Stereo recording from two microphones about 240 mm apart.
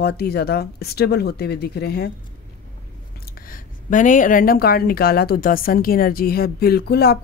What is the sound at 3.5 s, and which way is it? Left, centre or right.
Speech, left.